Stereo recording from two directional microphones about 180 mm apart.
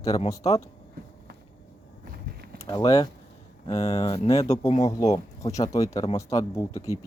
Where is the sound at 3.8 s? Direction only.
35° left (ahead or behind).